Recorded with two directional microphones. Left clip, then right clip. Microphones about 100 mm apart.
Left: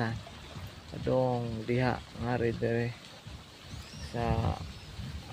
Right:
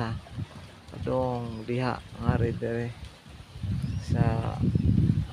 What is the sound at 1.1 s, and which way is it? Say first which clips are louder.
Speech: right 1 dB; 20° right (ahead or behind).